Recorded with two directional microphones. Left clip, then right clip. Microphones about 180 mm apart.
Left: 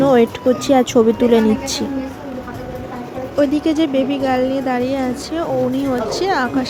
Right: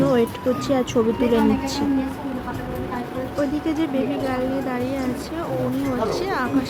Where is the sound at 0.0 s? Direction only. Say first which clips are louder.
Left 7 dB; 35° left (ahead or behind).